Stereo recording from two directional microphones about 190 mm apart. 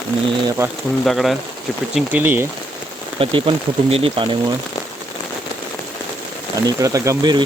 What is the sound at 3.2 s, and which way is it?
Speech, 25° right (ahead or behind).